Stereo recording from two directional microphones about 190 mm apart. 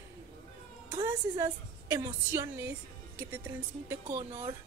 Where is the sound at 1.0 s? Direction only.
20° right (ahead or behind).